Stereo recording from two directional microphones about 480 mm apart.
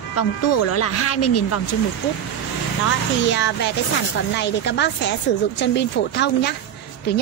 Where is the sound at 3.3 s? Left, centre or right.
Left.